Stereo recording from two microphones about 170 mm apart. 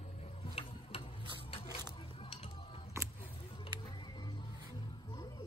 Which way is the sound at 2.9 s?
15° right (ahead or behind).